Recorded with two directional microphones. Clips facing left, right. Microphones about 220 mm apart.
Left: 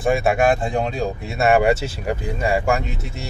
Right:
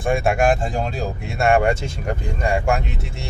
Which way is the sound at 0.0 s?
Centre (ahead or behind).